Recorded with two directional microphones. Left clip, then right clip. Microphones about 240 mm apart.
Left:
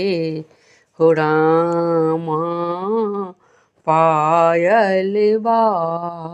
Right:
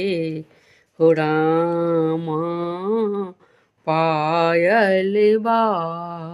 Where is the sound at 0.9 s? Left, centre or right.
Centre.